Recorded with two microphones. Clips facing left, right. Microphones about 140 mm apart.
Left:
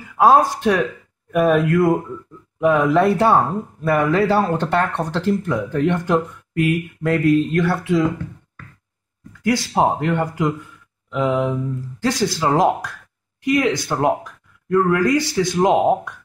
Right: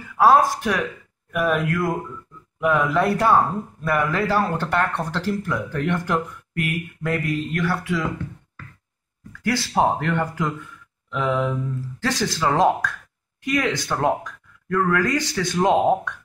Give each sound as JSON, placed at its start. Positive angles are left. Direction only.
{"t": 0.2, "sound": "speech", "side_deg": 20}
{"t": 9.4, "sound": "speech", "side_deg": 15}
{"t": 14.7, "sound": "speech", "side_deg": 25}
{"t": 15.0, "sound": "speech", "side_deg": 15}